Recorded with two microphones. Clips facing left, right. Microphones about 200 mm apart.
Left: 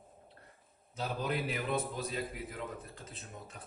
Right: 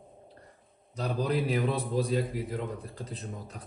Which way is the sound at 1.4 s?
35° right (ahead or behind).